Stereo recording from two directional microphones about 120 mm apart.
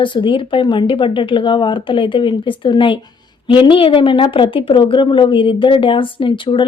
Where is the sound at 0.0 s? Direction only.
40° left (ahead or behind).